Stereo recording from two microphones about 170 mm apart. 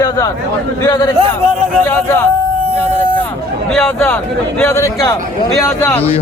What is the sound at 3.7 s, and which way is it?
Speech, 15° left (ahead or behind).